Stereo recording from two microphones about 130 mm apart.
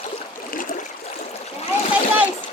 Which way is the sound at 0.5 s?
90° left.